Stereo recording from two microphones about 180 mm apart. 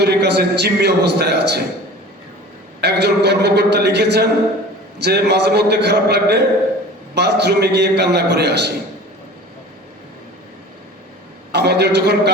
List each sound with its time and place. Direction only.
0.0 s a man's voice: 70° right (ahead or behind)
2.8 s a man's voice: 65° right (ahead or behind)
11.5 s a man's voice: 70° right (ahead or behind)